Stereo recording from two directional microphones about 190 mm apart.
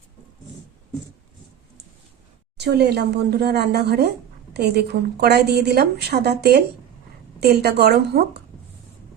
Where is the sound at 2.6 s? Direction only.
60° right (ahead or behind).